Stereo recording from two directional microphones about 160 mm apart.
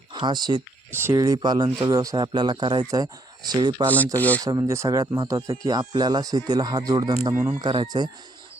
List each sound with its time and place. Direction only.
0.1 s speech: 30° right (ahead or behind)
0.9 s speech: 15° right (ahead or behind)
3.8 s speech: 10° left (ahead or behind)
4.4 s speech: 20° right (ahead or behind)